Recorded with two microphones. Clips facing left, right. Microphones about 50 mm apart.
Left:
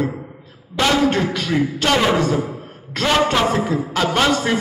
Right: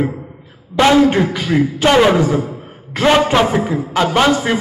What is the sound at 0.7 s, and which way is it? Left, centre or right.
A man's voice, right.